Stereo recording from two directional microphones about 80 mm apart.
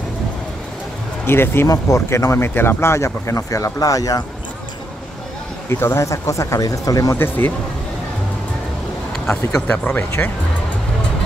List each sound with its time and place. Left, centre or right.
1.2 s speech: left
1.7 s speech: left
5.7 s speech: left
7.2 s speech: left
9.2 s speech: centre